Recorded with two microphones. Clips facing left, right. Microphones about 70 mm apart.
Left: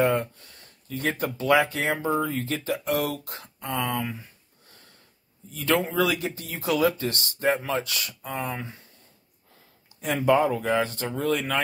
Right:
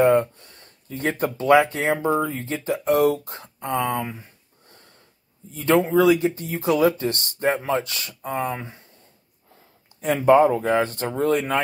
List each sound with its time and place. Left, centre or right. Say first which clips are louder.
0.0 s speech: right 6 dB; right
5.5 s speech: right 6 dB; right
10.0 s speech: right 6 dB; right